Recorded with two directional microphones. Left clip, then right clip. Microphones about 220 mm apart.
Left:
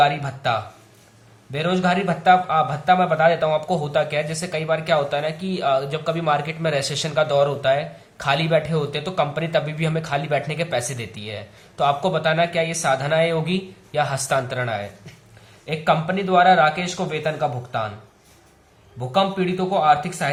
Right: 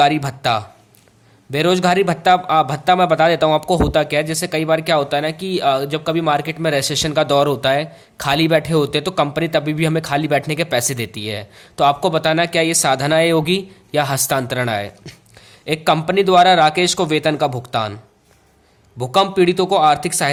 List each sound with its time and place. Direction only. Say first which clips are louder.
0.0 s a man's voice: right 4 dB; 50° right (ahead or behind)
18.9 s a man's voice: right 6 dB; 50° right (ahead or behind)